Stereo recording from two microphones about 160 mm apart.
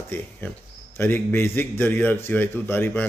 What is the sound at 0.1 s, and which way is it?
A man's voice, 10° left (ahead or behind).